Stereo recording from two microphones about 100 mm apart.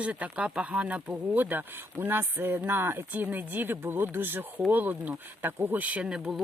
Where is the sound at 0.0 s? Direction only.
15° right (ahead or behind).